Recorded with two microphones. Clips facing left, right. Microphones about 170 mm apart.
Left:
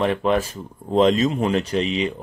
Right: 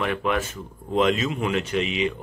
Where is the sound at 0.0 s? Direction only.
30° left (ahead or behind).